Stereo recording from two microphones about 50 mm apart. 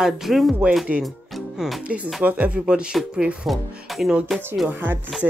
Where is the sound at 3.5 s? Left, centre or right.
Centre.